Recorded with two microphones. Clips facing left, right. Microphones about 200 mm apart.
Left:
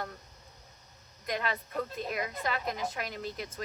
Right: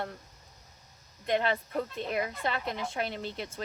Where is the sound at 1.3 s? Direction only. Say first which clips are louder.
Right 6 dB; 30° right (ahead or behind).